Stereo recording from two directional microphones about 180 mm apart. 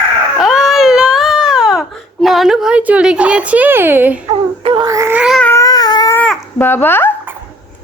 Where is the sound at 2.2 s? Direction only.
Centre (ahead or behind).